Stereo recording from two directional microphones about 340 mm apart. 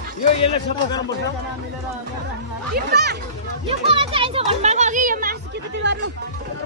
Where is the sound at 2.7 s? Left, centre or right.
Right.